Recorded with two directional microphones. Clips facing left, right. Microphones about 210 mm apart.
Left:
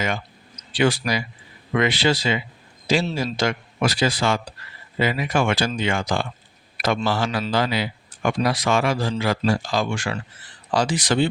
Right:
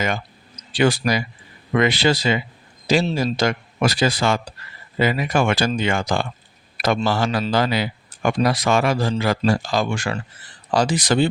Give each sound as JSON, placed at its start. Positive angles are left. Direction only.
{"t": 0.0, "sound": "a man's voice", "side_deg": -45}